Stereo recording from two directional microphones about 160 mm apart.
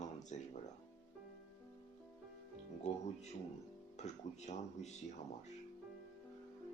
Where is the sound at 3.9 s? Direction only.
45° left (ahead or behind).